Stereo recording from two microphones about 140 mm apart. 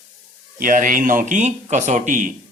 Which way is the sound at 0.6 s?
75° right (ahead or behind).